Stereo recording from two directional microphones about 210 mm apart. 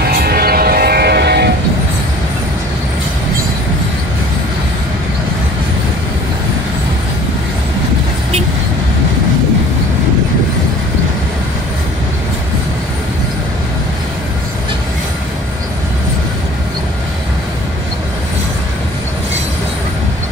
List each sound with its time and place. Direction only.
0.2 s train: 45° right (ahead or behind)